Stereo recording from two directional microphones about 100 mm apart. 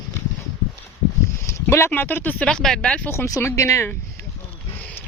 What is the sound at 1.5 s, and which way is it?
Speech, 25° left (ahead or behind).